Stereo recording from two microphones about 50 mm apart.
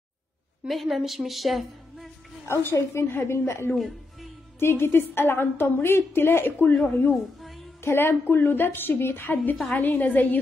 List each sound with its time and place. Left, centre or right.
0.7 s a woman's voice: centre
2.4 s a woman's voice: left
3.7 s music: centre
4.6 s a woman's voice: left
7.3 s music: centre
7.8 s a woman's voice: left
9.4 s a woman's voice: left